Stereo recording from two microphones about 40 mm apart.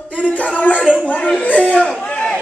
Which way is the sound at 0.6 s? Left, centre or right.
Left.